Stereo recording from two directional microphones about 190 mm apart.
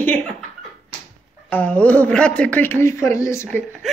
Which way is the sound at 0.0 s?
10° left (ahead or behind).